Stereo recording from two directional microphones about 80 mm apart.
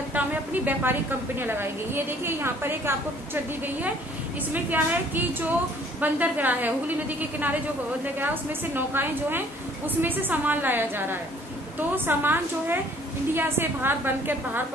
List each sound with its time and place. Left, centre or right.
0.1 s a woman's voice: right
4.5 s a woman's voice: right
8.7 s a woman's voice: right